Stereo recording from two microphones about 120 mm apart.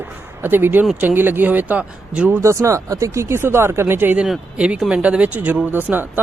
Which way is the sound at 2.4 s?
25° right (ahead or behind).